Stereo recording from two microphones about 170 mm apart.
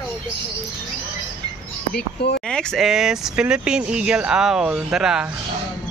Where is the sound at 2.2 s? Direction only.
75° left (ahead or behind).